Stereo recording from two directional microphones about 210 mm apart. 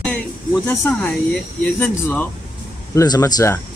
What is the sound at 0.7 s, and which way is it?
Speech, 5° left (ahead or behind).